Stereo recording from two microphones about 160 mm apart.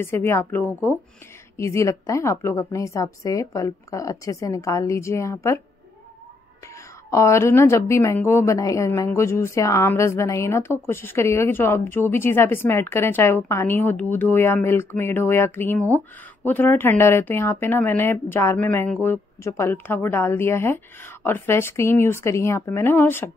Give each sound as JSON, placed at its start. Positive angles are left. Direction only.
{"t": 0.0, "sound": "a woman's voice", "side_deg": 15}
{"t": 7.1, "sound": "a woman's voice", "side_deg": 20}